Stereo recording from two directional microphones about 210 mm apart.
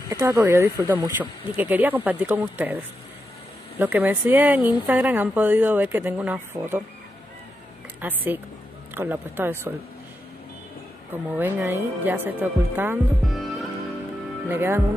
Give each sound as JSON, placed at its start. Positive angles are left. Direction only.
{"t": 0.1, "sound": "speech", "side_deg": -15}
{"t": 8.0, "sound": "speech", "side_deg": -10}
{"t": 11.3, "sound": "speech", "side_deg": -10}
{"t": 14.5, "sound": "speech", "side_deg": -10}